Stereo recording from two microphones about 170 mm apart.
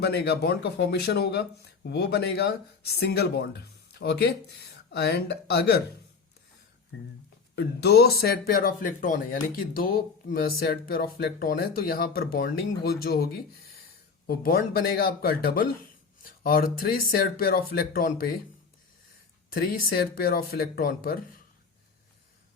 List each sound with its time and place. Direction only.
0.0 s speech: 75° left (ahead or behind)
6.9 s speech: 90° left
7.5 s speech: 75° left (ahead or behind); by 18.3 s 60° left (ahead or behind)
19.5 s speech: 65° left (ahead or behind)